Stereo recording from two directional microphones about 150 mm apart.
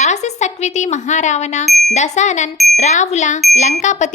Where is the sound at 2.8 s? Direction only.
50° left (ahead or behind).